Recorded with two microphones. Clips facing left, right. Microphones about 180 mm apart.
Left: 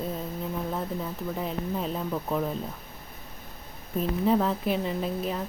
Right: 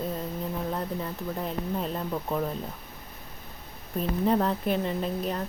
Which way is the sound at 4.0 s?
Centre (ahead or behind).